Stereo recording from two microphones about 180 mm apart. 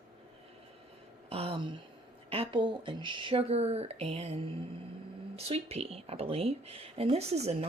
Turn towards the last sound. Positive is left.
turn(degrees=-35)  # may be behind; listen again after turning